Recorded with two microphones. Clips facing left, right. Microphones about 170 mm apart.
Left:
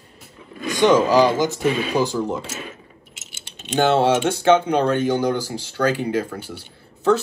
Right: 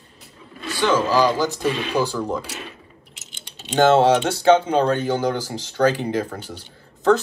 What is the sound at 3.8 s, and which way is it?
Speech, 40° right (ahead or behind).